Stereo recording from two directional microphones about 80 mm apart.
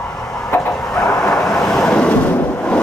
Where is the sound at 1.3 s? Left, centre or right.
Centre.